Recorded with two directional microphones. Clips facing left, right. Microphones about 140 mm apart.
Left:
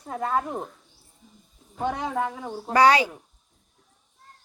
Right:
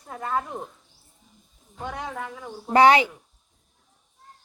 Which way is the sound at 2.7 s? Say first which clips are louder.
Right 2 dB; 20° right (ahead or behind).